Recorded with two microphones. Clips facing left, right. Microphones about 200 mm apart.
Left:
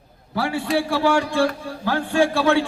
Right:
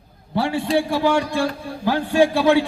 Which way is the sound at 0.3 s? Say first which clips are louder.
Right 2 dB; 25° right (ahead or behind).